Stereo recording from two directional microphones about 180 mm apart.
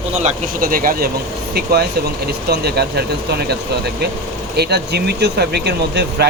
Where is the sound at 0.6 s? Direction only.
50° right (ahead or behind).